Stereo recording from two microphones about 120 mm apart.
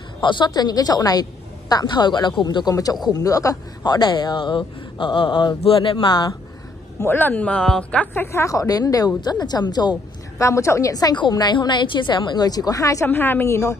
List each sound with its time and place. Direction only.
0.2 s speech: 40° left (ahead or behind)
7.0 s a woman's voice: 15° left (ahead or behind); by 9.9 s 35° left (ahead or behind)
10.4 s speech: 25° left (ahead or behind)